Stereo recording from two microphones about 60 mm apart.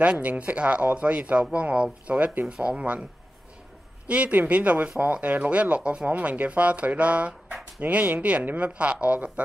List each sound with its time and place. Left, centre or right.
0.0 s speech: right
4.1 s speech: right